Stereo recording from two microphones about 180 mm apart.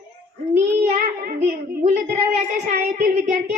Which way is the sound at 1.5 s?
45° right (ahead or behind).